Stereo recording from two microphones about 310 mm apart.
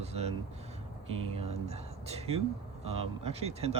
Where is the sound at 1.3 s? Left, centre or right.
Centre.